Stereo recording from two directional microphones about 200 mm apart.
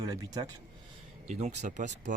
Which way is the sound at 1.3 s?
35° right (ahead or behind).